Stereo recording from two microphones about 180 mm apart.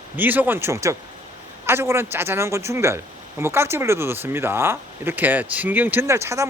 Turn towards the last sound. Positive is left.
turn(degrees=-15)  # may be behind; listen again after turning